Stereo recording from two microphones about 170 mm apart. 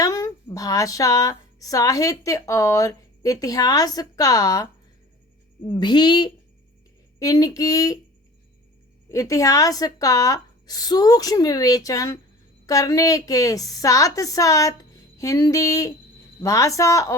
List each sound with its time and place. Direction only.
0.0 s a woman's voice: 20° left (ahead or behind)
9.0 s a woman's voice: 20° left (ahead or behind)